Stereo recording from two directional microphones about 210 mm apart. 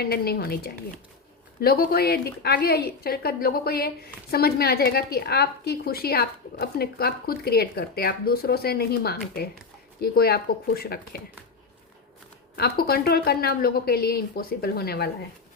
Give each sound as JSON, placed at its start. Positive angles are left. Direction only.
{"t": 0.0, "sound": "a woman's voice", "side_deg": 50}
{"t": 12.5, "sound": "a woman's voice", "side_deg": 45}